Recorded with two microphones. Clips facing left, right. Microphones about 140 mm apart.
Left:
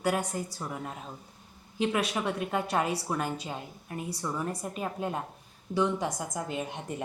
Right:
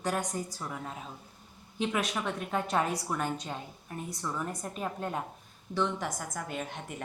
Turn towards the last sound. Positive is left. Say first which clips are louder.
# left 3 dB
turn(degrees=15)  # may be behind; listen again after turning